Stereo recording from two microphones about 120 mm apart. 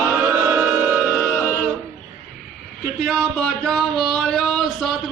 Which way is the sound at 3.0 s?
Centre (ahead or behind).